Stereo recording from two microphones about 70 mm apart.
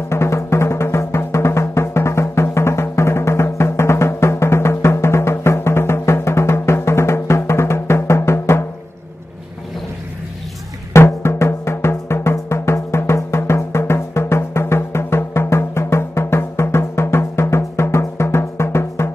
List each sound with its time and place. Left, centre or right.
0.1 s music: left
10.9 s drum: left